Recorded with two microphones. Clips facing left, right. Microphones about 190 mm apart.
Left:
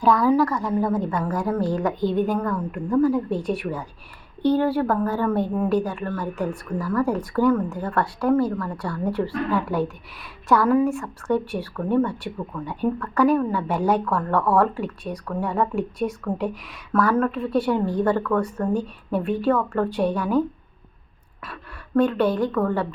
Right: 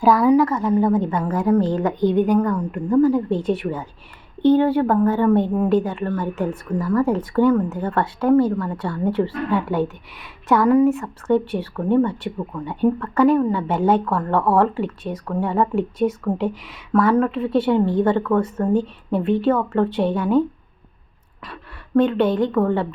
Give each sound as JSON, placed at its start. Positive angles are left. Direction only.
{"t": 0.2, "sound": "speech", "side_deg": -20}
{"t": 21.9, "sound": "speech", "side_deg": -20}